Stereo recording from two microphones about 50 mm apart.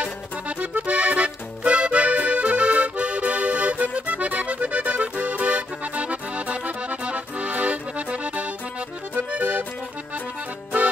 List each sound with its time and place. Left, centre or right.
0.0 s music: right
9.3 s accordion: right